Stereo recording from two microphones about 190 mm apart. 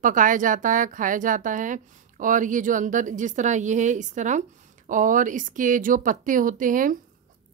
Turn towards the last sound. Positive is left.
turn(degrees=-45)  # may be behind; listen again after turning